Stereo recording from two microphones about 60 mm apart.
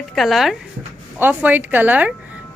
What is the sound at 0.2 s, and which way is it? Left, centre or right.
Speech, centre.